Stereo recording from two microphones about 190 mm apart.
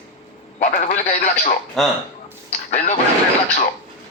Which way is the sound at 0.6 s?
35° left (ahead or behind).